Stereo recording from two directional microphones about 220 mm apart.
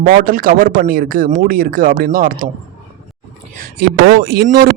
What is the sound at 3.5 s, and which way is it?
Speech, 45° right (ahead or behind).